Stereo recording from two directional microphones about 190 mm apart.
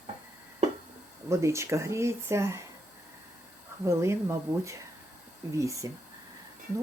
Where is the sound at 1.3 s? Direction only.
15° right (ahead or behind).